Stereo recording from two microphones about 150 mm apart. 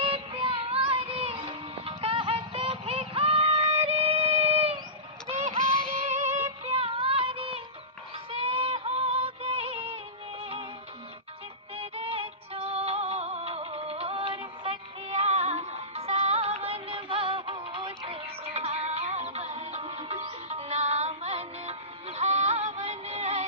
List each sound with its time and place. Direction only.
0.0 s music: 40° right (ahead or behind)
5.6 s music: 5° left (ahead or behind)
6.1 s music: 50° right (ahead or behind)
6.7 s child singing: 40° right (ahead or behind)
8.3 s music: 40° right (ahead or behind)
11.7 s music: 40° right (ahead or behind)